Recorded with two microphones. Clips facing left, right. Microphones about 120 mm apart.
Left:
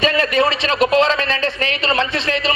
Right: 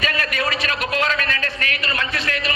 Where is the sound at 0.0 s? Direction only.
25° left (ahead or behind).